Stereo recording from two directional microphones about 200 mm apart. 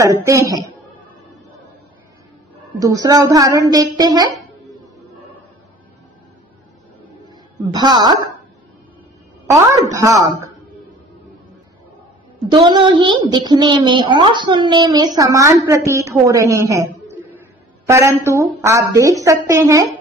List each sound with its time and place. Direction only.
0.0 s child singing: 15° right (ahead or behind)
2.8 s child singing: 15° right (ahead or behind)
7.7 s a woman's voice: 20° right (ahead or behind)
9.5 s child singing: 15° right (ahead or behind)
12.4 s a woman's voice: 20° right (ahead or behind)
17.8 s child singing: 15° right (ahead or behind)